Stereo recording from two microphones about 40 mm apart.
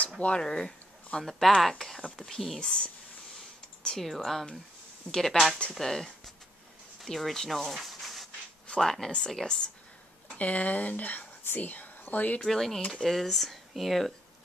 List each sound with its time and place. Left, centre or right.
0.4 s speech: centre
1.2 s speech: centre
4.0 s speech: centre
7.1 s sanding: centre
8.6 s a sound: centre
9.3 s speech: centre
10.3 s speech: left
12.4 s speech: centre